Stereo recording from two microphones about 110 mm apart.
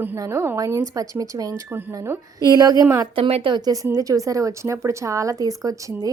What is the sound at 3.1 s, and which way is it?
Speech, 55° right (ahead or behind).